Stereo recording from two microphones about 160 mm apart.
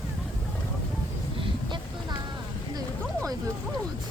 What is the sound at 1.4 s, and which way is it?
Vehicle, 30° right (ahead or behind).